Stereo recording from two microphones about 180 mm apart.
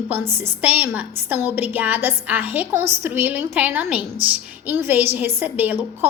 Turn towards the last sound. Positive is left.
turn(degrees=-10)  # may be behind; listen again after turning